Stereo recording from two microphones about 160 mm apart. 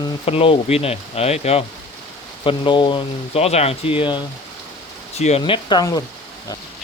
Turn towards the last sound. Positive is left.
turn(degrees=25)  # may be behind; listen again after turning